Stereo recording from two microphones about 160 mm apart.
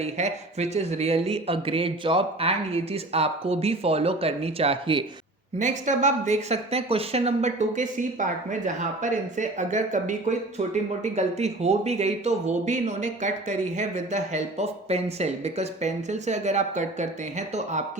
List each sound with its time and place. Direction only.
0.0 s speech: 45° right (ahead or behind)
5.5 s speech: 50° right (ahead or behind)